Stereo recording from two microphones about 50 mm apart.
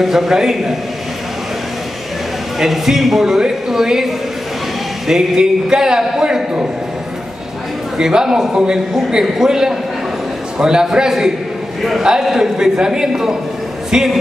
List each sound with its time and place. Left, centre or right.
0.0 s a man's voice: centre
2.6 s a man's voice: centre
8.0 s a man's voice: centre